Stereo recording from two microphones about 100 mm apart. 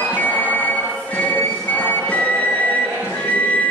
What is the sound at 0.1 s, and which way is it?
Music, 20° left (ahead or behind).